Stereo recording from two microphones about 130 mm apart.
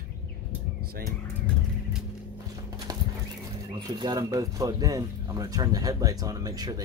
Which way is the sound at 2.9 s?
30° right (ahead or behind).